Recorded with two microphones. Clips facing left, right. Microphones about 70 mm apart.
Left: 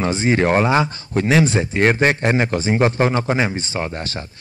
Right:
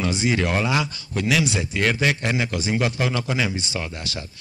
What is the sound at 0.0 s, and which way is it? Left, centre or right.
Speech, left.